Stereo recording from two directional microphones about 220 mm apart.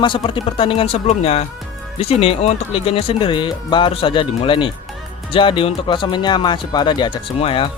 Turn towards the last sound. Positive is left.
turn(degrees=25)  # may be behind; listen again after turning